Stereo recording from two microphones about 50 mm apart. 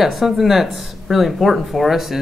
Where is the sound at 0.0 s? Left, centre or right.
Centre.